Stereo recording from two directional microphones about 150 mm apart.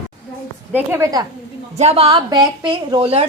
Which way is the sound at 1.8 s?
45° right (ahead or behind).